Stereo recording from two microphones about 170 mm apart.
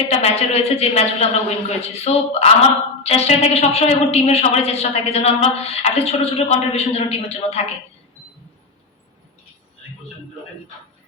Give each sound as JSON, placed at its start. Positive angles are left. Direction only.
{"t": 0.2, "sound": "a woman's voice", "side_deg": 35}